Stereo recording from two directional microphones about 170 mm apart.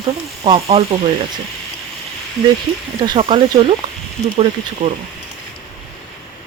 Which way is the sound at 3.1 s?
30° right (ahead or behind).